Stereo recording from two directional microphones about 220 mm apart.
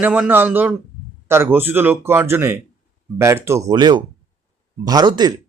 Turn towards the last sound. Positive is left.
turn(degrees=-20)  # may be behind; listen again after turning